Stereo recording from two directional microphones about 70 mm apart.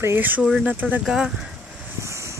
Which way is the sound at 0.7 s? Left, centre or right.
Right.